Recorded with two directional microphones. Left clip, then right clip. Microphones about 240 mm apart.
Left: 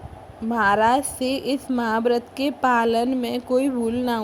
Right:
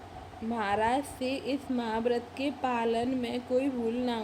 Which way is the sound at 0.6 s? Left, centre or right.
Left.